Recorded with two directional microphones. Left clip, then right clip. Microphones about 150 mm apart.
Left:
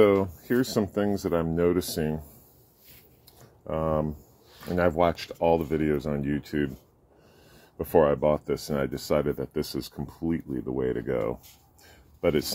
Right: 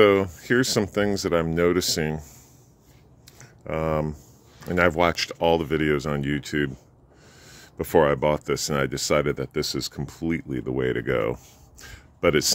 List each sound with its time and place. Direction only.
0.0 s speech: 45° right (ahead or behind)
3.6 s speech: 55° right (ahead or behind); by 6.7 s 35° right (ahead or behind)
7.7 s speech: 50° right (ahead or behind)
10.6 s speech: 60° right (ahead or behind)
11.9 s a sound: 55° right (ahead or behind)